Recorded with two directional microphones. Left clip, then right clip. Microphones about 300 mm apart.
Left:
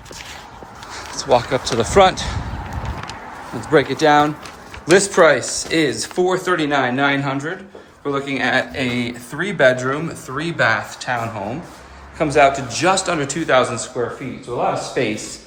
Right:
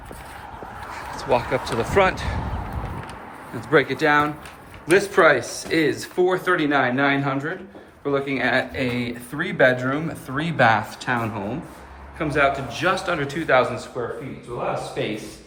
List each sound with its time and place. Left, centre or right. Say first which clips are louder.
0.9 s speech: left 5 dB; centre
3.6 s speech: left 4 dB; centre
12.2 s speech: left 6 dB; centre
15.0 s speech: left 9 dB; centre